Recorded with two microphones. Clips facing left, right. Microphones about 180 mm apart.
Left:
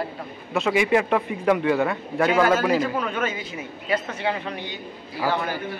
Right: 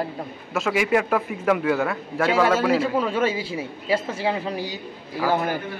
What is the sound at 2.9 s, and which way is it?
A man's voice, 30° right (ahead or behind).